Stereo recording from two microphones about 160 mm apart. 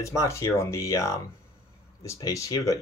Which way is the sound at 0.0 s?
20° left (ahead or behind).